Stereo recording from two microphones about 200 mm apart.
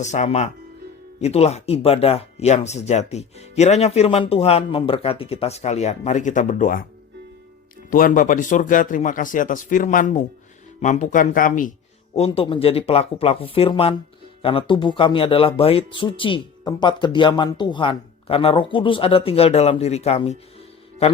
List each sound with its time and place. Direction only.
0.0 s speech: 35° left (ahead or behind)
7.9 s speech: 45° left (ahead or behind)
12.1 s speech: 30° left (ahead or behind)